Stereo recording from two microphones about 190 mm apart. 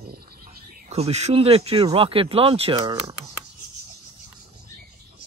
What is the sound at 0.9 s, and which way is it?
Speech, 35° right (ahead or behind).